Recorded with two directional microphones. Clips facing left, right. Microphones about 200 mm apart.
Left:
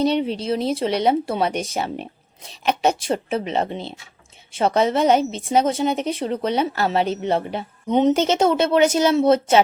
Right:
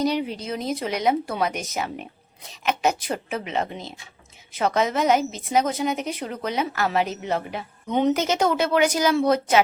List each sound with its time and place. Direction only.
0.0 s a woman's voice: 25° left (ahead or behind)